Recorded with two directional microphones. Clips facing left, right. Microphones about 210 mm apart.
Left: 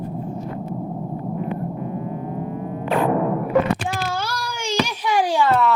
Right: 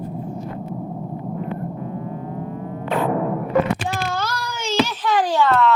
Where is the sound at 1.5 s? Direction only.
20° left (ahead or behind).